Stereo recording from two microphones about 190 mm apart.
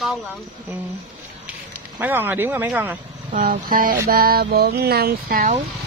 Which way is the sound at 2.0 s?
10° right (ahead or behind).